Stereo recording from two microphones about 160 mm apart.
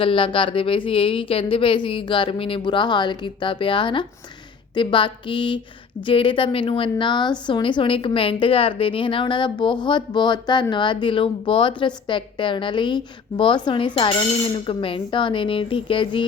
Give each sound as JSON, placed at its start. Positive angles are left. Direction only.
{"t": 0.0, "sound": "a woman's voice", "side_deg": 30}